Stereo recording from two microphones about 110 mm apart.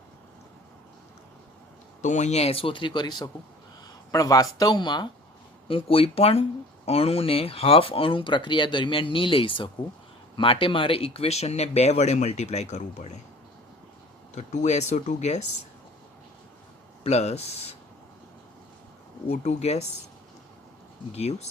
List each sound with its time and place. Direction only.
2.0 s speech: 90° left; by 5.0 s 40° left (ahead or behind)
5.6 s speech: 55° left (ahead or behind); by 13.1 s 90° left
14.3 s speech: 90° left
17.0 s speech: 75° left (ahead or behind)
19.3 s speech: 90° left
21.1 s speech: 70° left (ahead or behind)